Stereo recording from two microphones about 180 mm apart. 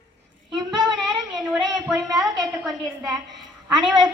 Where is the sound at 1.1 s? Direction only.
20° right (ahead or behind).